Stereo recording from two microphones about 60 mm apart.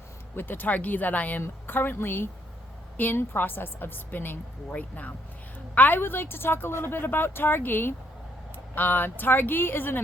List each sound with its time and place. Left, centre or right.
0.3 s a woman's voice: left